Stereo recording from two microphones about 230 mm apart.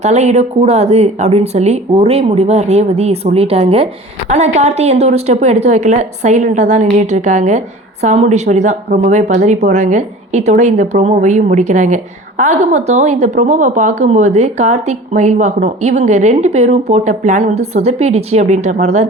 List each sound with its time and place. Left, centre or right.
0.0 s a woman's voice: right